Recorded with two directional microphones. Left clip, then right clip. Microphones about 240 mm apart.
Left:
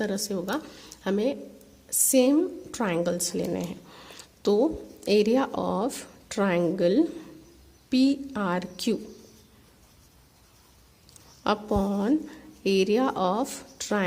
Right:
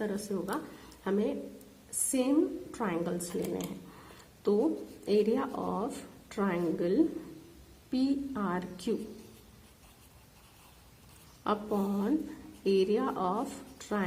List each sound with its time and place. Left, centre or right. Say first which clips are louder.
0.0 s a woman's voice: left 6 dB; left
2.7 s a woman's voice: left 9 dB; left
4.0 s a sound: left 5 dB; left
5.0 s a woman's voice: left 6 dB; left
11.4 s a woman's voice: left 6 dB; left